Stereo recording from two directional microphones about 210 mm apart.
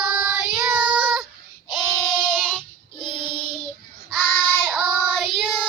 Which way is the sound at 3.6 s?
5° left (ahead or behind).